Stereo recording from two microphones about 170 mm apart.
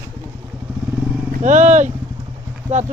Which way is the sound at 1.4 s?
45° right (ahead or behind).